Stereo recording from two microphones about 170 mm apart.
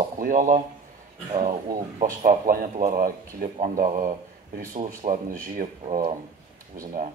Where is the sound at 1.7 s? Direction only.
50° right (ahead or behind).